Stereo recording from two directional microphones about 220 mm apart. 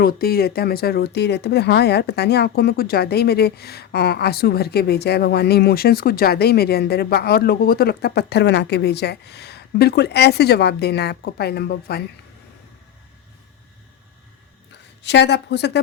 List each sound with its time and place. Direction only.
0.0 s speech: 45° left (ahead or behind)
15.0 s speech: 50° left (ahead or behind)